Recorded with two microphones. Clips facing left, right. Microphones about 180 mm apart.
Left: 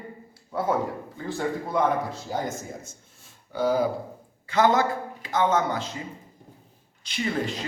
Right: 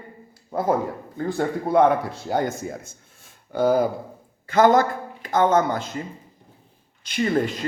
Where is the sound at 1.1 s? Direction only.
55° right (ahead or behind).